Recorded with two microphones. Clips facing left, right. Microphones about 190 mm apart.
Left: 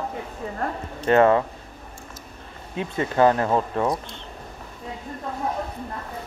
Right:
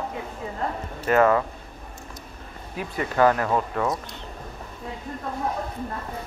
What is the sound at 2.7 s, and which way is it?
Speech, 25° left (ahead or behind).